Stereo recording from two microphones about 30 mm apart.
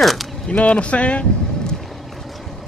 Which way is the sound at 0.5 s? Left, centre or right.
Left.